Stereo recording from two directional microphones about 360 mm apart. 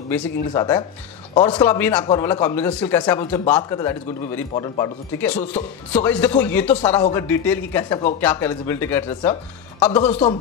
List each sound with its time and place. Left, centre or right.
0.1 s a man's voice: centre